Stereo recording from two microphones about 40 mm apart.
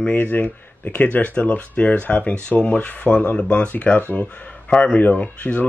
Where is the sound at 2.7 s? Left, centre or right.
Left.